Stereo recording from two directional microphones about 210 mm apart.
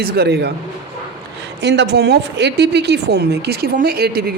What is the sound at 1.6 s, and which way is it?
A woman's voice, 55° right (ahead or behind).